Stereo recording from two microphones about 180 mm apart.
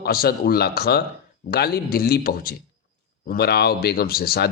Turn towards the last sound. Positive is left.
turn(degrees=60)  # may be behind; listen again after turning